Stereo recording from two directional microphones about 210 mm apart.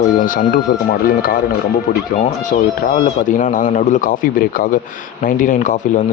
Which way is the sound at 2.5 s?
40° left (ahead or behind).